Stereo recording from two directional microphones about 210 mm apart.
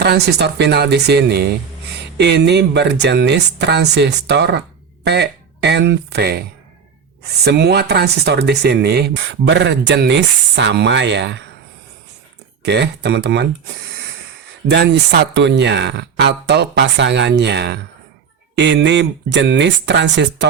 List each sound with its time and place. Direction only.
0.0 s speech: 50° right (ahead or behind)
12.6 s speech: 55° right (ahead or behind)
14.7 s speech: 55° right (ahead or behind)